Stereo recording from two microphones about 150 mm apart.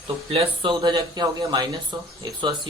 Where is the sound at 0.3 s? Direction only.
35° right (ahead or behind).